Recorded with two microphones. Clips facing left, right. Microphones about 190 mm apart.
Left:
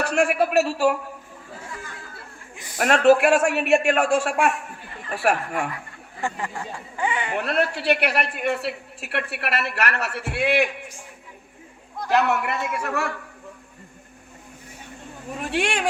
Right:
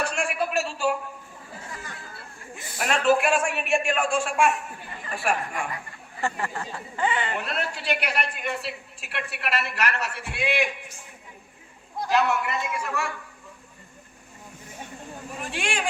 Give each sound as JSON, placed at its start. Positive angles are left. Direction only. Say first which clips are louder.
{"t": 0.0, "sound": "a woman's voice", "louder": "left 6 dB", "side_deg": 65}
{"t": 2.7, "sound": "a woman's voice", "louder": "left 6 dB", "side_deg": 60}
{"t": 6.2, "sound": "speech", "louder": "even", "side_deg": 15}
{"t": 7.3, "sound": "a woman's voice", "louder": "left 7 dB", "side_deg": 60}
{"t": 12.0, "sound": "a woman's voice", "louder": "left 2 dB", "side_deg": 60}
{"t": 15.4, "sound": "a woman's voice", "louder": "left 6 dB", "side_deg": 65}